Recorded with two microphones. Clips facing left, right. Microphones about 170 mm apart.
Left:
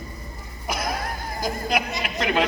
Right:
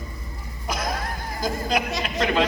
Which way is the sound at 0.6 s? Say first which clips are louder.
Even; 10° left (ahead or behind).